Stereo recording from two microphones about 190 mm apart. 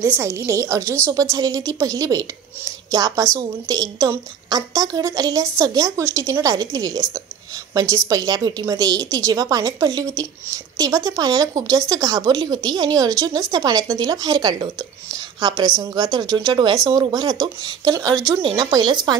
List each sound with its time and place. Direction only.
0.2 s a woman's voice: 15° right (ahead or behind)
0.8 s a woman's voice: 5° left (ahead or behind)
1.3 s a woman's voice: 15° right (ahead or behind)